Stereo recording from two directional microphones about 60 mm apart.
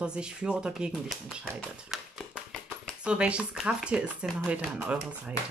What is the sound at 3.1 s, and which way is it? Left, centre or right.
Speech, centre.